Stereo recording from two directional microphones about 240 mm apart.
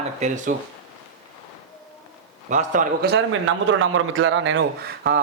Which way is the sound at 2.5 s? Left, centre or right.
Right.